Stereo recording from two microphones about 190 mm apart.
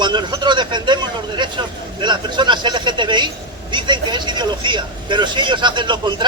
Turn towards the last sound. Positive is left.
turn(degrees=-25)  # may be behind; listen again after turning